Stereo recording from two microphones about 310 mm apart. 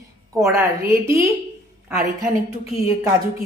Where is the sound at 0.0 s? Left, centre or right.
Centre.